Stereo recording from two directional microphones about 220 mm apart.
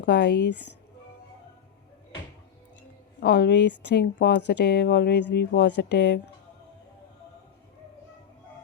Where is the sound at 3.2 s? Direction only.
50° left (ahead or behind).